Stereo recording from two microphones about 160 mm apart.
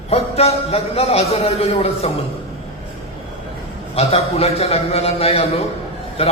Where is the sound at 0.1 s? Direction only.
40° left (ahead or behind).